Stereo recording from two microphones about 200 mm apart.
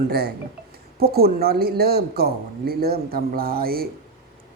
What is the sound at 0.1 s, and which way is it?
Speech, 55° right (ahead or behind).